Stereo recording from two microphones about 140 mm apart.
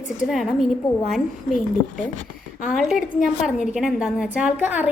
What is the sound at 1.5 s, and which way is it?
Speech, 65° left (ahead or behind).